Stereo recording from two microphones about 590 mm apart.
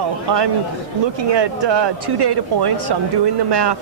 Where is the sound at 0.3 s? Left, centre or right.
Right.